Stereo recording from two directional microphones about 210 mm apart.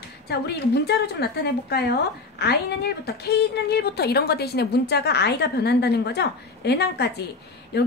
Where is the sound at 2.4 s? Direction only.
50° left (ahead or behind).